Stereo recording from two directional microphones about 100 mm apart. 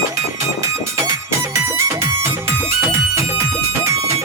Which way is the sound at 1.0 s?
30° right (ahead or behind).